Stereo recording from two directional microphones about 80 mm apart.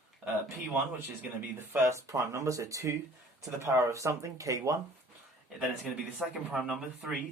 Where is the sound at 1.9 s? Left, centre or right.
Right.